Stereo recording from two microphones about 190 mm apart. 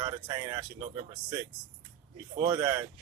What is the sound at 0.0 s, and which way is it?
Speech, 20° right (ahead or behind).